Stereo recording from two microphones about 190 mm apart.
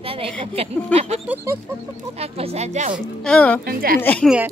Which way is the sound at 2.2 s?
30° right (ahead or behind).